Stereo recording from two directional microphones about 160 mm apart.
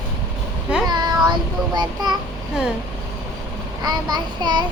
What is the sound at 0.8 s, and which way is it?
Child singing, 25° right (ahead or behind).